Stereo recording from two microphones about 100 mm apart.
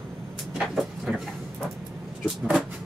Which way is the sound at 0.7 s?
Centre (ahead or behind).